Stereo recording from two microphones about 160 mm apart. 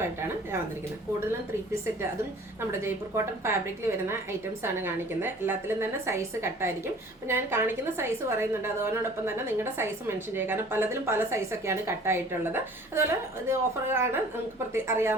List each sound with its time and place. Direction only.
0.0 s a woman's voice: 15° right (ahead or behind)
2.8 s a woman's voice: 15° right (ahead or behind)